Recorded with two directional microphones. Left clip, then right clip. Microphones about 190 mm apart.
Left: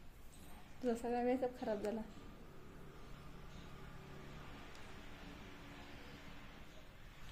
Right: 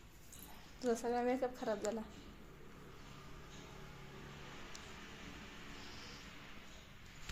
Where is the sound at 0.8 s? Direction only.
20° left (ahead or behind).